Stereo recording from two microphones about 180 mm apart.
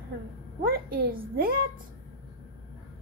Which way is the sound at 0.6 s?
55° right (ahead or behind).